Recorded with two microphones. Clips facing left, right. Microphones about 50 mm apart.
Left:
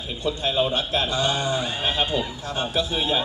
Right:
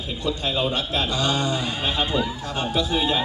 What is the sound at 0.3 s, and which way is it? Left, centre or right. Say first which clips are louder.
A man's voice: left 1 dB; left.